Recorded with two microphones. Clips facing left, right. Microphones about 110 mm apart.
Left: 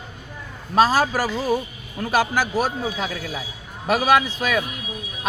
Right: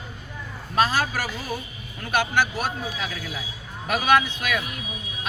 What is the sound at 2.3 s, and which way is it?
Speech, 35° left (ahead or behind).